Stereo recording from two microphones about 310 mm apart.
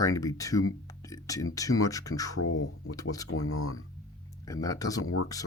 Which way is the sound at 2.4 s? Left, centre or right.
Left.